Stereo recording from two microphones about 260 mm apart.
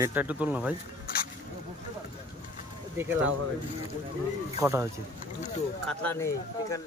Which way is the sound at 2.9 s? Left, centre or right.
Centre.